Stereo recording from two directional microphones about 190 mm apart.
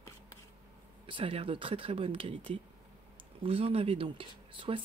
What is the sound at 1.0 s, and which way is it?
Speech, 30° right (ahead or behind).